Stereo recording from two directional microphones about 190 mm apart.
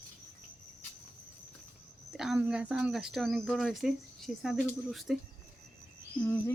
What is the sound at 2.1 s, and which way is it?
Speech, 5° right (ahead or behind).